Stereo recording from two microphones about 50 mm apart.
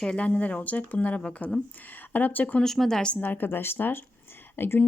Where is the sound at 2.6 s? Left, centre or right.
Centre.